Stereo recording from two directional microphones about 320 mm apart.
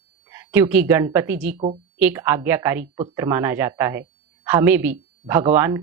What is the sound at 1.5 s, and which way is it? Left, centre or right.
Speech, centre.